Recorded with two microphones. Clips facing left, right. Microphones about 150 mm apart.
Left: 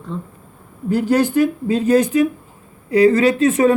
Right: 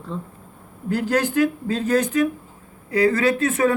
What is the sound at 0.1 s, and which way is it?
Speech, centre (ahead or behind).